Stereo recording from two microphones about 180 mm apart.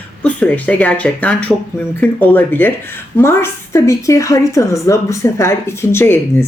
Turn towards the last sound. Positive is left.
turn(degrees=15)  # may be behind; listen again after turning